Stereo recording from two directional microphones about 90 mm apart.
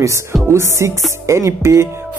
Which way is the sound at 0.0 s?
30° right (ahead or behind).